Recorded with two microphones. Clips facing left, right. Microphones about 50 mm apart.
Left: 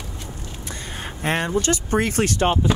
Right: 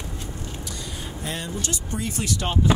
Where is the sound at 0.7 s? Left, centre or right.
Left.